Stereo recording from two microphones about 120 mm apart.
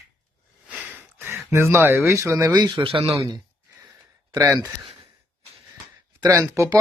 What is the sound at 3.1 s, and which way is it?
Speech, 35° right (ahead or behind).